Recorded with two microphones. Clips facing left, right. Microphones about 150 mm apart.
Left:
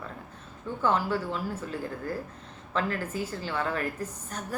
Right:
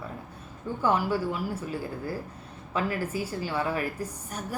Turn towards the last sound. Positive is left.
turn(degrees=-10)  # may be behind; listen again after turning